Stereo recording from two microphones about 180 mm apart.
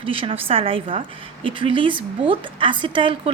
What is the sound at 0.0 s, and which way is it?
A woman's voice, 30° right (ahead or behind).